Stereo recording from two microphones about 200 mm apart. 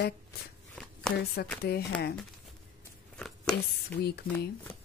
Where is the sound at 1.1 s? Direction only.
55° left (ahead or behind).